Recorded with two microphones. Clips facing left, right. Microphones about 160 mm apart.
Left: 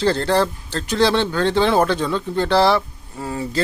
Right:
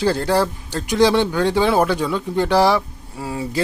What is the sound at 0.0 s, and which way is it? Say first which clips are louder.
Speech: even; 10° right (ahead or behind).